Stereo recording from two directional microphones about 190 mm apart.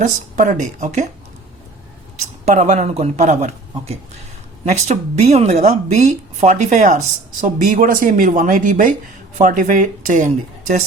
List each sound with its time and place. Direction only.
0.0 s a woman's voice: 40° right (ahead or behind)
2.4 s a woman's voice: 40° right (ahead or behind)